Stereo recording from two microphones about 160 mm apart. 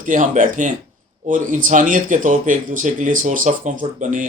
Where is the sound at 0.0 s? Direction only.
55° right (ahead or behind).